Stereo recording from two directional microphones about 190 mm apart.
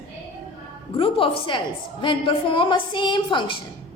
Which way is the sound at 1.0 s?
30° left (ahead or behind).